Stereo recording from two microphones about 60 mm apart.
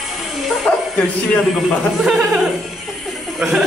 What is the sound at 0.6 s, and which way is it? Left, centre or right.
Speech, centre.